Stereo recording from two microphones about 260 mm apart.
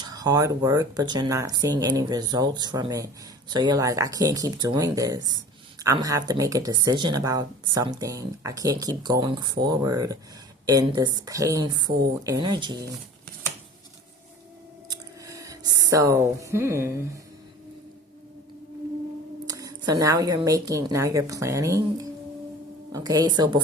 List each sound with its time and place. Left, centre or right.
0.0 s a woman's voice: centre
14.8 s a sound: centre
19.5 s a woman's voice: centre
22.9 s a woman's voice: centre